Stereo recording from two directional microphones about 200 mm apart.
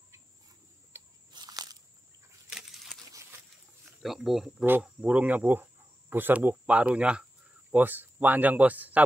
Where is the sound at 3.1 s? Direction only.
15° right (ahead or behind).